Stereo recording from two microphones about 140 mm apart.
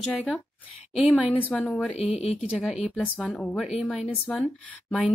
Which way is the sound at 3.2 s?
Centre (ahead or behind).